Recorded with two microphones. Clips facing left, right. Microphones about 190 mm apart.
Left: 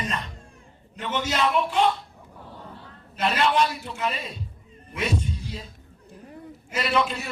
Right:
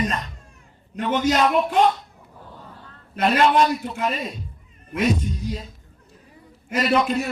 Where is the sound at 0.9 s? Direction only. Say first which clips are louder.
Right 7 dB; 50° right (ahead or behind).